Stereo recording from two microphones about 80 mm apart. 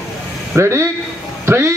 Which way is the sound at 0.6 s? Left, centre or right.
Right.